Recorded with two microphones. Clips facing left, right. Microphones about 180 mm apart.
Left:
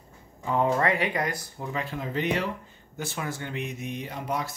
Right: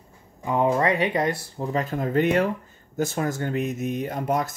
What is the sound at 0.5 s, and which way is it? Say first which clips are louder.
Speech: right 3 dB; 20° right (ahead or behind).